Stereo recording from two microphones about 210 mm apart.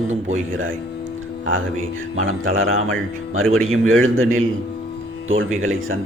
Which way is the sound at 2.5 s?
75° right (ahead or behind).